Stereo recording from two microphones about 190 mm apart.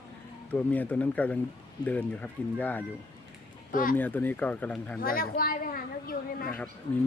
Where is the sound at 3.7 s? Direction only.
45° left (ahead or behind).